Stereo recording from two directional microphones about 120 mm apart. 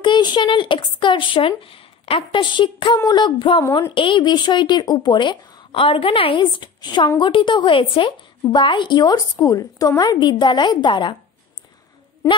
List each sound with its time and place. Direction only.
0.0 s a woman's voice: 40° left (ahead or behind)